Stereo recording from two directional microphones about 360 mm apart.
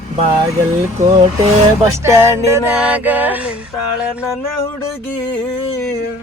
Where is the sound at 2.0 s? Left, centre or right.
Centre.